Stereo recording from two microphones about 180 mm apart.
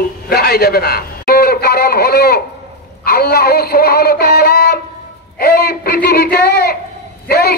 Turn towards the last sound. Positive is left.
turn(degrees=60)  # may be behind; listen again after turning